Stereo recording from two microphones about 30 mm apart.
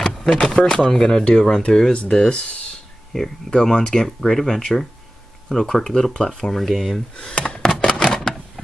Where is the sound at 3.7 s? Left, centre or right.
Left.